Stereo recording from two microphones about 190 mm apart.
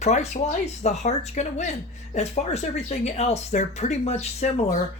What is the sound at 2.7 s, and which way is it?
Speech, 35° left (ahead or behind).